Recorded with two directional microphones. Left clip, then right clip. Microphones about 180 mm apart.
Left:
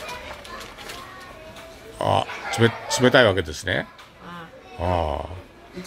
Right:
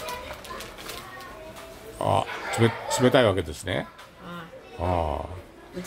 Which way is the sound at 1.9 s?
10° left (ahead or behind).